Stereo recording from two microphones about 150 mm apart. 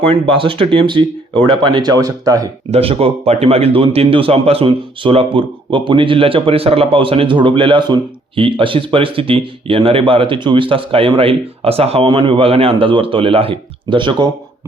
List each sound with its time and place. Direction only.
0.1 s a man's voice: 35° right (ahead or behind)
2.6 s a man's voice: 40° right (ahead or behind)